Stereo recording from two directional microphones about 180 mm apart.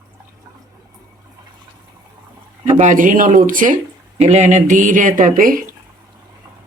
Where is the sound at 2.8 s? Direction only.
45° right (ahead or behind).